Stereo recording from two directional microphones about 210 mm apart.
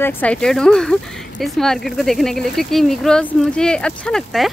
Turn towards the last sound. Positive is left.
turn(degrees=0)  # may be behind; listen again after turning